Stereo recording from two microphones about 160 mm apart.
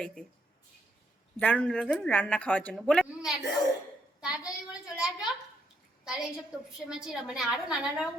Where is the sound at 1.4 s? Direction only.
10° left (ahead or behind).